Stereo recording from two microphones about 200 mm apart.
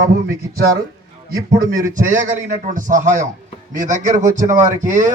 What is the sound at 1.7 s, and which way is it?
A man's voice, 40° right (ahead or behind).